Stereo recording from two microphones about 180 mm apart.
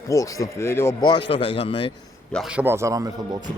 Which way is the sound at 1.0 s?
25° left (ahead or behind).